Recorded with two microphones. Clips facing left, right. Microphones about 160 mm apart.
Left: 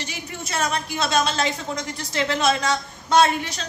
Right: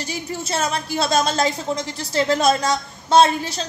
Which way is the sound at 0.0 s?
35° right (ahead or behind).